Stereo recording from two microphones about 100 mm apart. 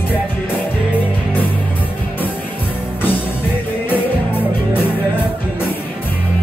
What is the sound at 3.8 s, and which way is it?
Music, 20° left (ahead or behind).